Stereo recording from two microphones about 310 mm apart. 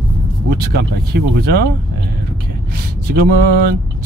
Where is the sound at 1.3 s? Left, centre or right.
Right.